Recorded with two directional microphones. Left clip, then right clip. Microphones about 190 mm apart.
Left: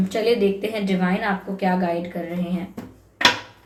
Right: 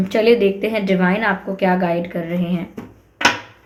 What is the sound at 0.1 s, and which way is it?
A woman's voice, 40° right (ahead or behind).